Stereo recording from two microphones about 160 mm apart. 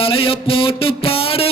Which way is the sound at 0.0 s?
35° left (ahead or behind).